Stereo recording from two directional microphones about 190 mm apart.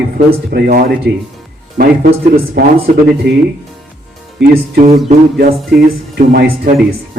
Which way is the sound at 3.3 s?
65° right (ahead or behind).